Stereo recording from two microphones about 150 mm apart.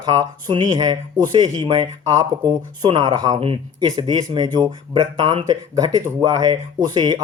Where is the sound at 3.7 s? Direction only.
30° right (ahead or behind).